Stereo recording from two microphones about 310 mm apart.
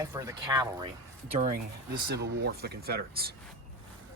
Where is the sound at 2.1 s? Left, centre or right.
Right.